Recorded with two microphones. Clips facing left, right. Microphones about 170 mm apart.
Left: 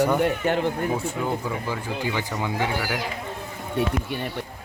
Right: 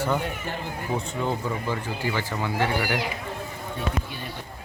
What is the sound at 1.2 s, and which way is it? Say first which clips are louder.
Speech: even; 10° left (ahead or behind).